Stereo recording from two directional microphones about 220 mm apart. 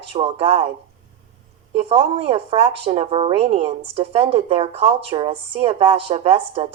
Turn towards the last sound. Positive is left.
turn(degrees=-25)  # may be behind; listen again after turning